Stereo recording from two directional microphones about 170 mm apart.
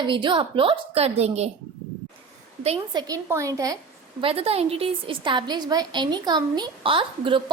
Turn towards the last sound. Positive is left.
turn(degrees=-30)  # may be behind; listen again after turning